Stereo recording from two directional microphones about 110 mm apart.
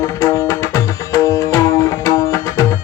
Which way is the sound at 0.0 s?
30° left (ahead or behind).